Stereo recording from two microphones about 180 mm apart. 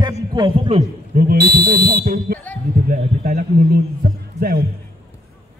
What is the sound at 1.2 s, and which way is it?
A man's voice, 55° right (ahead or behind).